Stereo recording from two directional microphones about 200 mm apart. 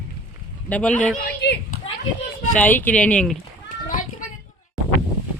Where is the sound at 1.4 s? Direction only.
55° left (ahead or behind).